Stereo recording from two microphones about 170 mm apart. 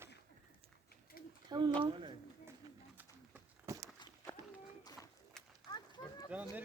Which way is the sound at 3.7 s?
15° right (ahead or behind).